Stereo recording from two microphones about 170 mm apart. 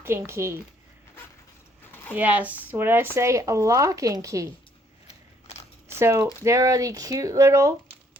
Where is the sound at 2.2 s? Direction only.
10° right (ahead or behind).